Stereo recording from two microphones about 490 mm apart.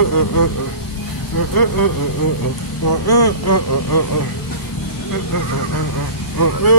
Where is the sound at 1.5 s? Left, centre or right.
Left.